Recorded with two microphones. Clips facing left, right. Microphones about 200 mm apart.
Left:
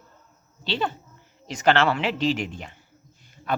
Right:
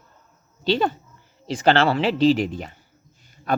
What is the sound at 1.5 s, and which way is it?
A man's voice, 30° right (ahead or behind).